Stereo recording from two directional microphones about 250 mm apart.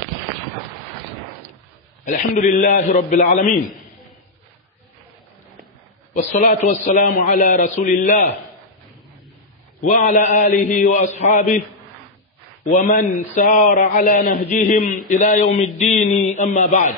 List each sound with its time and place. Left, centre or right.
2.0 s a man's voice: left
6.1 s a man's voice: left
9.8 s a sound: left
10.7 s a man's voice: left
12.6 s a man's voice: left
15.9 s a sound: left